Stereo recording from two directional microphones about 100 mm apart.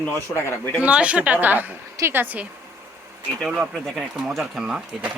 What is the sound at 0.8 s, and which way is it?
Speech, 10° right (ahead or behind).